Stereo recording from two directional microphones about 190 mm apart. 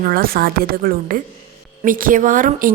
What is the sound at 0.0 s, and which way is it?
A woman's voice, 50° right (ahead or behind).